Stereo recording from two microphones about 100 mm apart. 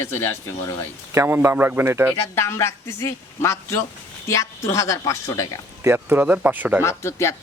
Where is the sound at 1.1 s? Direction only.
25° right (ahead or behind).